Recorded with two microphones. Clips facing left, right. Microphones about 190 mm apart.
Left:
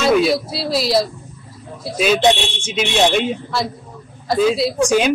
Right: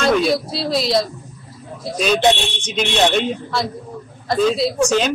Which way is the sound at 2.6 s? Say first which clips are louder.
Left 1 dB; 5° left (ahead or behind).